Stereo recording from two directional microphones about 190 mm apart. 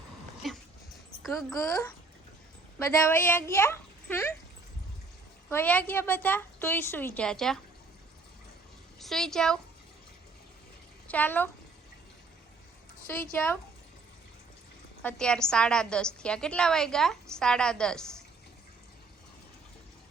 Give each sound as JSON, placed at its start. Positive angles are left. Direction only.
{"t": 0.4, "sound": "dog", "side_deg": 0}
{"t": 1.2, "sound": "a woman's voice", "side_deg": 0}
{"t": 1.5, "sound": "a woman's voice", "side_deg": 15}
{"t": 5.5, "sound": "a woman's voice", "side_deg": 10}
{"t": 9.0, "sound": "a woman's voice", "side_deg": 0}
{"t": 11.1, "sound": "a woman's voice", "side_deg": 10}
{"t": 13.1, "sound": "a woman's voice", "side_deg": 10}
{"t": 15.0, "sound": "a woman's voice", "side_deg": 5}